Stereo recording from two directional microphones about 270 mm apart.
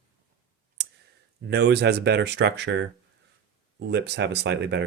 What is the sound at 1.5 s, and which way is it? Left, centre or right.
Speech, right.